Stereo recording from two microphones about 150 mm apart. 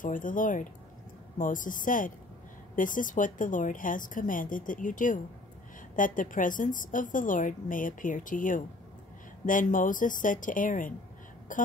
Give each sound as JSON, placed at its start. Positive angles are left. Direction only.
{"t": 0.0, "sound": "a woman's voice", "side_deg": 60}